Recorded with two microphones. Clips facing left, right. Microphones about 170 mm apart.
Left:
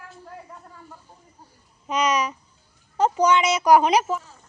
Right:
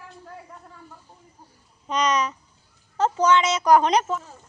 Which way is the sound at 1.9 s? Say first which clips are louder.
Even; 10° left (ahead or behind).